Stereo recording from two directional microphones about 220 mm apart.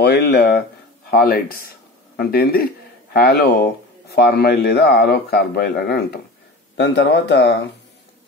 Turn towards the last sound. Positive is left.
turn(degrees=50)  # may be behind; listen again after turning